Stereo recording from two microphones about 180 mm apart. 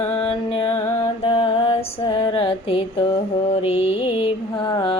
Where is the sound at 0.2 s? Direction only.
30° left (ahead or behind).